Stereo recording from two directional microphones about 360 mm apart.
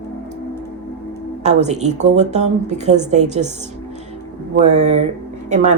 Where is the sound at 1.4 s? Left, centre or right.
Centre.